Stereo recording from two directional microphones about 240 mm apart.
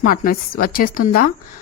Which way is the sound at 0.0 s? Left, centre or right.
Left.